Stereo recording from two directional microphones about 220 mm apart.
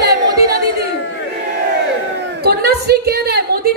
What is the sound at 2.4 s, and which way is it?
Speech, 45° right (ahead or behind).